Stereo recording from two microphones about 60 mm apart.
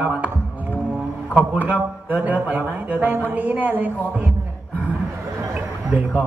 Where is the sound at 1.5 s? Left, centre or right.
Right.